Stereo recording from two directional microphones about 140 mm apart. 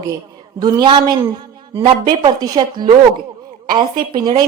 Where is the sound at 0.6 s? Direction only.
35° right (ahead or behind).